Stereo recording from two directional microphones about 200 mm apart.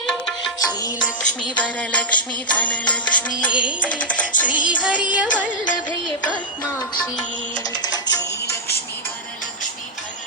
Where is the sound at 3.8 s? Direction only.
5° left (ahead or behind).